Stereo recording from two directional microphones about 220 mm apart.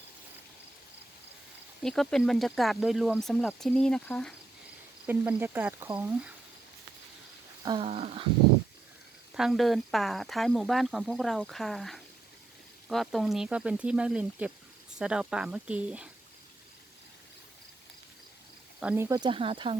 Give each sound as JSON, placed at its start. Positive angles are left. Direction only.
{"t": 1.8, "sound": "speech", "side_deg": 0}
{"t": 5.0, "sound": "speech", "side_deg": -10}
{"t": 7.6, "sound": "speech", "side_deg": -20}
{"t": 9.3, "sound": "speech", "side_deg": 0}
{"t": 18.8, "sound": "speech", "side_deg": -10}